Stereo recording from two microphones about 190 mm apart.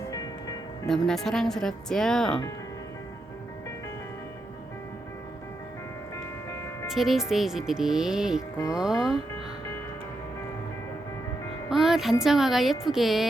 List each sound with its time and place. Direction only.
0.1 s music: 20° left (ahead or behind)
0.9 s speech: centre (ahead or behind)
6.9 s speech: centre (ahead or behind)
11.7 s music: centre (ahead or behind)
12.2 s speech: centre (ahead or behind)